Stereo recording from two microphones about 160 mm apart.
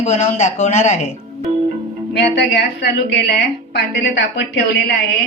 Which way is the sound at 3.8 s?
90° left.